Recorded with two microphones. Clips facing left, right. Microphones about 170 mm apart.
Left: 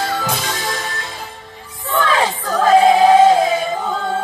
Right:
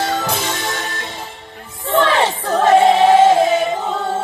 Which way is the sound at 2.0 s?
25° right (ahead or behind).